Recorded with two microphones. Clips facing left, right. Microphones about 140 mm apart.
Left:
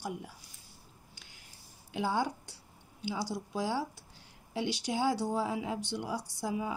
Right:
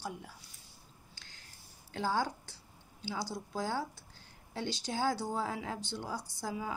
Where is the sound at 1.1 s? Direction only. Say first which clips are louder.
Left 1 dB; 90° right.